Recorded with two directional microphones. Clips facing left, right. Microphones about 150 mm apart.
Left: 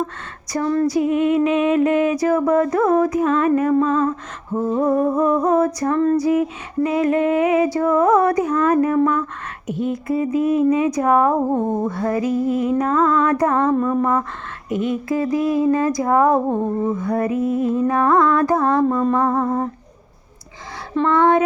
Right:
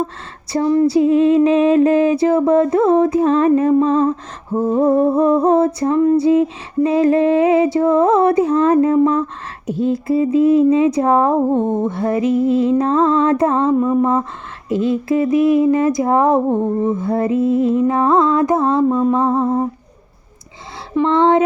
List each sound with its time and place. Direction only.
0.5 s female singing: 20° right (ahead or behind)
0.9 s female singing: 30° right (ahead or behind)
1.5 s speech: 35° right (ahead or behind)
13.7 s female singing: 10° right (ahead or behind)
14.0 s speech: 25° right (ahead or behind)
18.9 s female singing: 10° right (ahead or behind)
19.1 s speech: 20° right (ahead or behind)
21.1 s speech: 25° right (ahead or behind)